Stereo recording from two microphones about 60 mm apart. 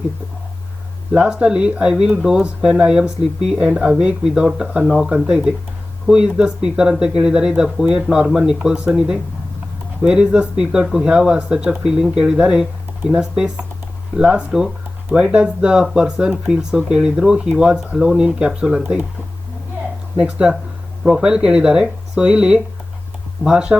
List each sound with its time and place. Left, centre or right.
1.1 s speech: centre
20.1 s speech: centre